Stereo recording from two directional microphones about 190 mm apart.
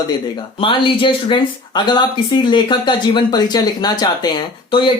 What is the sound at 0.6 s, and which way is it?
Speech, 25° left (ahead or behind).